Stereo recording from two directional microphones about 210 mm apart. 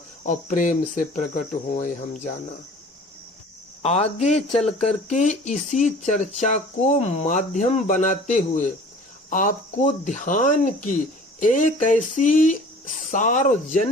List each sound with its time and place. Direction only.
0.2 s speech: 35° left (ahead or behind)
3.8 s speech: 30° left (ahead or behind)